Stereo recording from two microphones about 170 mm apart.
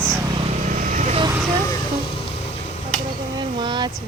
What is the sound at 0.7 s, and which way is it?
Vehicle, 50° right (ahead or behind).